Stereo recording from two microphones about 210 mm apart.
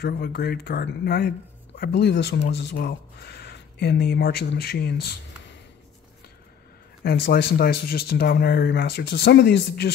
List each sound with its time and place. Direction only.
0.0 s speech: 45° left (ahead or behind)
7.0 s speech: 45° left (ahead or behind)